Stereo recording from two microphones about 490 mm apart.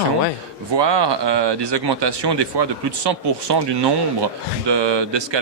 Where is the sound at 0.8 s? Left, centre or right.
Right.